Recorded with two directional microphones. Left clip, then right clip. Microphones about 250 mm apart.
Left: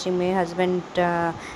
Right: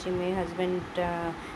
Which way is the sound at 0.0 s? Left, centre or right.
Left.